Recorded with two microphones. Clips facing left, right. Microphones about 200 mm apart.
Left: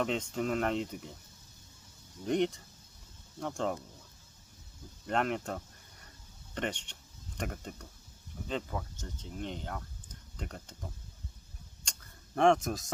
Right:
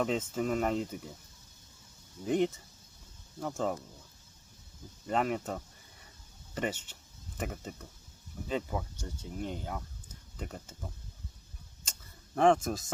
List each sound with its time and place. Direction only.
0.0 s speech: 5° right (ahead or behind)
2.2 s speech: 5° right (ahead or behind)
5.0 s speech: 5° right (ahead or behind)
11.9 s tick-tock: centre (ahead or behind)